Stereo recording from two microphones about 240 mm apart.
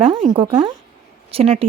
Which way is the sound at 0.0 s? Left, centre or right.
Right.